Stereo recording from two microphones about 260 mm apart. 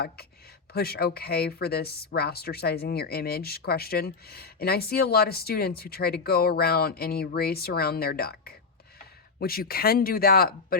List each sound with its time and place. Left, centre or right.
0.7 s speech: left